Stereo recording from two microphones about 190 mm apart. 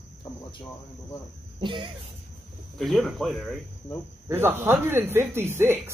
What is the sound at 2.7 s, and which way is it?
Speech, centre (ahead or behind).